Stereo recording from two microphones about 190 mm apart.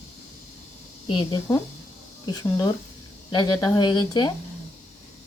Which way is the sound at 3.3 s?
20° left (ahead or behind).